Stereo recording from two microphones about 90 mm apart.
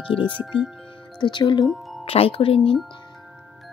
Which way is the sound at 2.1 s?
90° left.